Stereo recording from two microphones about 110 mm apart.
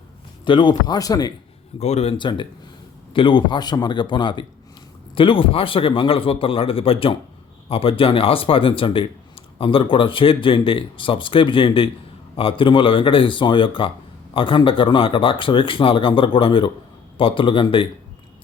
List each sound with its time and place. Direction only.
0.4 s speech: 45° left (ahead or behind)
1.8 s speech: 80° left
2.1 s a man's voice: 45° left (ahead or behind)